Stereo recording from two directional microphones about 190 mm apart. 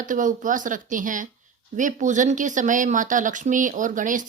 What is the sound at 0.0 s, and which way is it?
Speech, 45° right (ahead or behind).